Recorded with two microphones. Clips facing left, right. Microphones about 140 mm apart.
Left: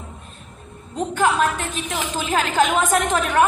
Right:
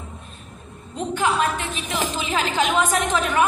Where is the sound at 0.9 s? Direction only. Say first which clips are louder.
Left 2 dB; 45° left (ahead or behind).